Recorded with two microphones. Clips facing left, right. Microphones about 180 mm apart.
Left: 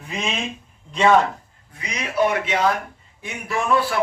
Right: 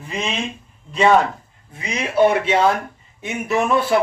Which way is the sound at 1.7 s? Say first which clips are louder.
Right 5 dB; 25° right (ahead or behind).